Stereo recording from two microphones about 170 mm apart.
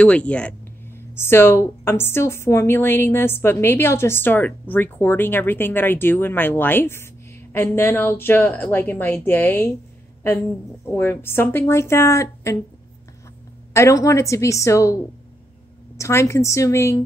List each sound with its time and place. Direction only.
0.0 s speech: 5° left (ahead or behind)
10.9 s speech: 10° left (ahead or behind)
13.7 s speech: 20° left (ahead or behind)
16.0 s speech: 15° left (ahead or behind)